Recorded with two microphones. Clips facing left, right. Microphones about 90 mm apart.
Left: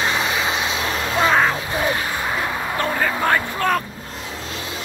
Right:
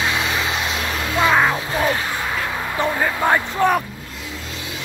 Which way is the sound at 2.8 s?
10° right (ahead or behind).